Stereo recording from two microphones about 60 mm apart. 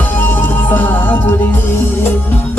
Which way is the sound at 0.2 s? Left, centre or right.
Left.